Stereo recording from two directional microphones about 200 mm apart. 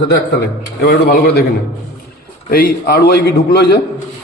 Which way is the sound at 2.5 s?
50° left (ahead or behind).